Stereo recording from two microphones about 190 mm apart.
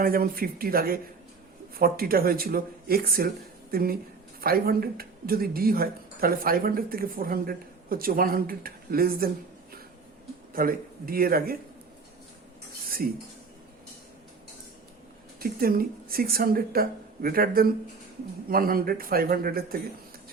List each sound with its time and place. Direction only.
0.0 s speech: 50° right (ahead or behind)
10.5 s speech: 50° right (ahead or behind)
15.4 s speech: 50° right (ahead or behind)